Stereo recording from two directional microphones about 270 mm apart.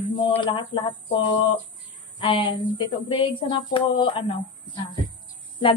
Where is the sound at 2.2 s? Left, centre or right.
Centre.